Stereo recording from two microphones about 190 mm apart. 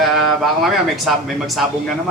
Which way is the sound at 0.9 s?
Centre (ahead or behind).